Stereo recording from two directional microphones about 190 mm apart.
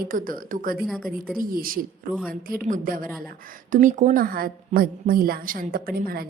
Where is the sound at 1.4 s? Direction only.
50° right (ahead or behind).